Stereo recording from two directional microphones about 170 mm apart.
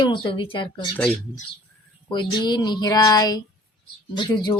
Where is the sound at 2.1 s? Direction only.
25° left (ahead or behind).